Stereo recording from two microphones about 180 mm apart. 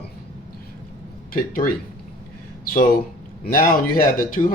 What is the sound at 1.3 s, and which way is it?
Speech, 55° left (ahead or behind).